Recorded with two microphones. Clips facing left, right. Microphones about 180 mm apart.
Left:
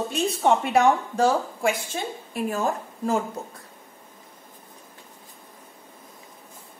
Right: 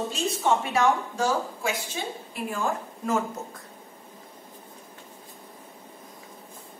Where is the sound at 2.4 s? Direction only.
35° left (ahead or behind).